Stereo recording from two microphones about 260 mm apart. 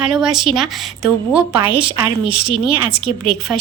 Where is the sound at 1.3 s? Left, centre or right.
Right.